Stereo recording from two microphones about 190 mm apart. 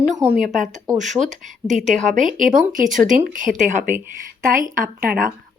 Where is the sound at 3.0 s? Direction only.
45° right (ahead or behind).